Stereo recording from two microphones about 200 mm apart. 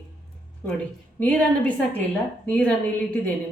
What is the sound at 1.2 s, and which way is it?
A woman's voice, 5° left (ahead or behind).